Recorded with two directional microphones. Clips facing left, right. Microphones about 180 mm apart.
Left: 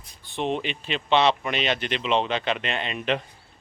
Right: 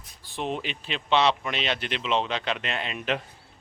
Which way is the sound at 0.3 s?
Centre (ahead or behind).